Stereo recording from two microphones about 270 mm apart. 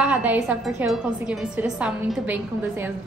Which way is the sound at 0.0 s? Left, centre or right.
Centre.